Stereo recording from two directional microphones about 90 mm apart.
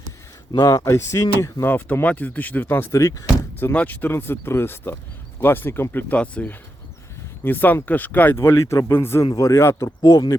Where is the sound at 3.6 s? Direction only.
20° left (ahead or behind).